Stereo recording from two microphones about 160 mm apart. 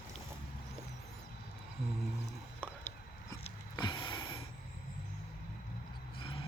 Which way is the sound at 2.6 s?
15° left (ahead or behind).